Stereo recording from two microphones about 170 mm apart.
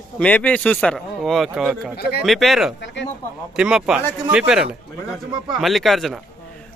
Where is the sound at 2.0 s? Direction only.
65° left (ahead or behind).